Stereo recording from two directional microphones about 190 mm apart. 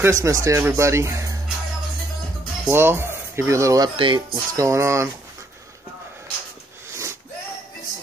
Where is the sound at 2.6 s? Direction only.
10° right (ahead or behind).